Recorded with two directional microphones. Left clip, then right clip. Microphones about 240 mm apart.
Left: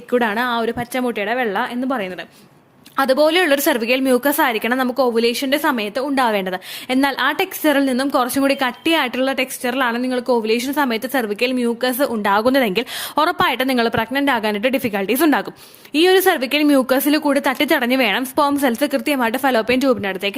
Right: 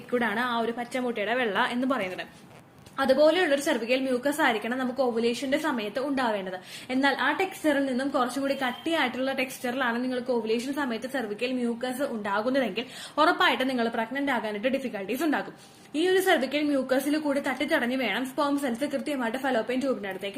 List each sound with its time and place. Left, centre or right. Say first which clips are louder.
0.1 s a woman's voice: left 9 dB; left
2.9 s a woman's voice: left 7 dB; left